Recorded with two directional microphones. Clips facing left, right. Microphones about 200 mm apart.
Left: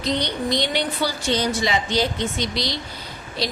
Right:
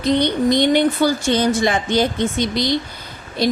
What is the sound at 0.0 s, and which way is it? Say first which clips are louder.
Speech: right 8 dB; 55° right (ahead or behind).